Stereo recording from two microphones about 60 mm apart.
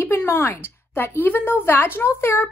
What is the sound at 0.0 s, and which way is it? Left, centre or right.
Speech, left.